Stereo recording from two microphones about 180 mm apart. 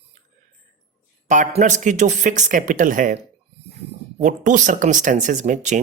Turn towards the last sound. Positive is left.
turn(degrees=-40)  # may be behind; listen again after turning